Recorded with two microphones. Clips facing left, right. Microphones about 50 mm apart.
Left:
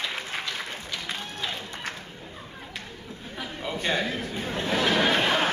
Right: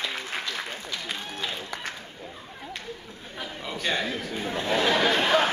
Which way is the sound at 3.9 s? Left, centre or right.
Centre.